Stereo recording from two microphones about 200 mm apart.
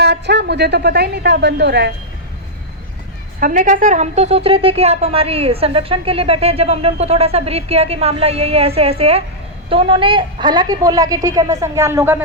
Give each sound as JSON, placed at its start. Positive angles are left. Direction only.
{"t": 0.0, "sound": "a man's voice", "side_deg": -55}
{"t": 3.4, "sound": "a woman's voice", "side_deg": -40}